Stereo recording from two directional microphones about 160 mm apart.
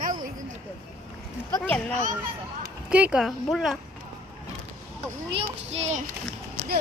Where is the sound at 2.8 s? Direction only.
5° right (ahead or behind).